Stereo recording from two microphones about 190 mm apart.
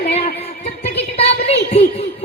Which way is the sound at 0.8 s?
30° left (ahead or behind).